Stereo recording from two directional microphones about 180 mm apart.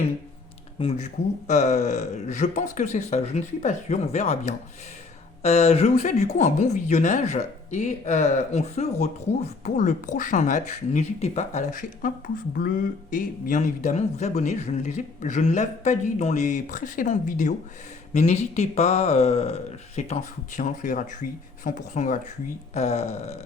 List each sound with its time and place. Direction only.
0.8 s speech: 35° left (ahead or behind)